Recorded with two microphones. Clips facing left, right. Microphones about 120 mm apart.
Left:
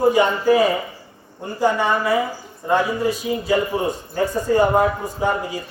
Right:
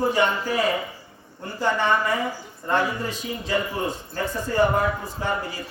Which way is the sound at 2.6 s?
10° left (ahead or behind).